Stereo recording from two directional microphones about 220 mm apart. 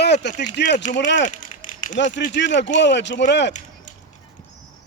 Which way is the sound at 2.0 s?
35° left (ahead or behind).